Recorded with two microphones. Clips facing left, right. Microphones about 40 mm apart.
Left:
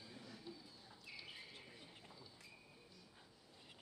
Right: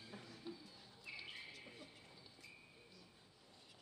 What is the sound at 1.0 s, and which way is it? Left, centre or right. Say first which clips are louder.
Bird: right 4 dB; right.